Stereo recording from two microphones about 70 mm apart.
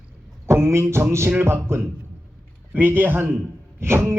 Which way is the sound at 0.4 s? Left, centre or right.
Right.